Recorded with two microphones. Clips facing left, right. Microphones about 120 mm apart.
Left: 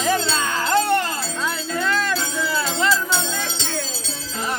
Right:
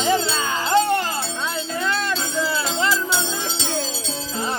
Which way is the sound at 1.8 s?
25° right (ahead or behind).